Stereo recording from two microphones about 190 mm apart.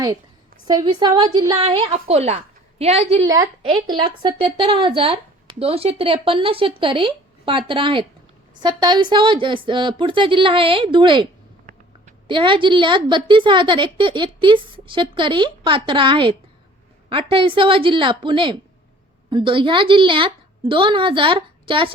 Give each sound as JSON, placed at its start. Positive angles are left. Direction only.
{"t": 0.7, "sound": "a woman's voice", "side_deg": -20}
{"t": 12.3, "sound": "a woman's voice", "side_deg": -25}